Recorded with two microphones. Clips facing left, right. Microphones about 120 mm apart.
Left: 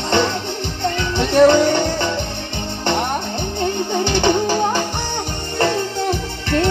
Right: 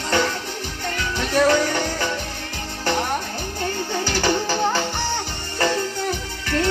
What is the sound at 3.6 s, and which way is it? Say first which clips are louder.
Music: left 5 dB; 25° left (ahead or behind).